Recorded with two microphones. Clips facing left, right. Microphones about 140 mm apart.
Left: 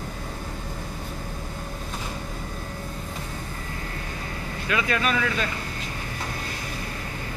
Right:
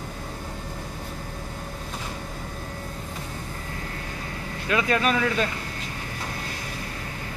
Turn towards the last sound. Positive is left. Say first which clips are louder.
# right 2 dB
turn(degrees=-30)  # may be behind; listen again after turning